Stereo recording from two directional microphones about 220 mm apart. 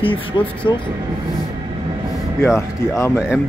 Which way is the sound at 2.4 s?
10° left (ahead or behind).